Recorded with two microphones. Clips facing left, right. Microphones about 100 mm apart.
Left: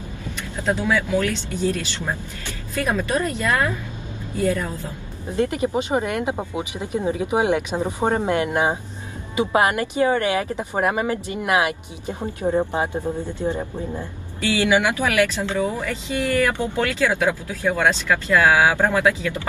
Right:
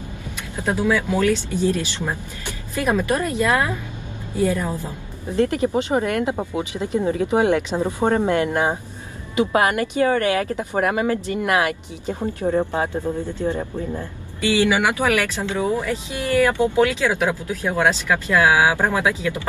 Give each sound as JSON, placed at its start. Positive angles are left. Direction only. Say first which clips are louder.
{"t": 0.7, "sound": "speech", "louder": "right 1 dB", "side_deg": -15}
{"t": 5.3, "sound": "speech", "louder": "right 2 dB", "side_deg": 20}
{"t": 14.5, "sound": "speech", "louder": "right 1 dB", "side_deg": -20}